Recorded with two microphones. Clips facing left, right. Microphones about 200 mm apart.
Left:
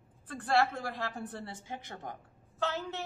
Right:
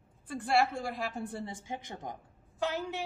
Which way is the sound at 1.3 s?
15° right (ahead or behind).